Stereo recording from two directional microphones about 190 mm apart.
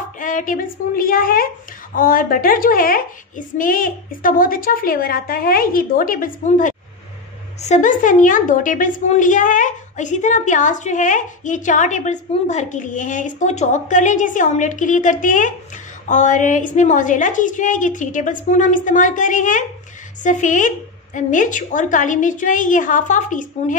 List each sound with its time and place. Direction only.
0.2 s a child's voice: 45° left (ahead or behind)